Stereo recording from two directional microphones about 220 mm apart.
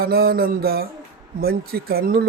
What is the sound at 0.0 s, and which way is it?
Speech, 45° right (ahead or behind).